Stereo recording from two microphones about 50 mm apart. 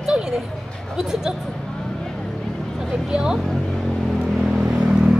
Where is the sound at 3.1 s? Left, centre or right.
Centre.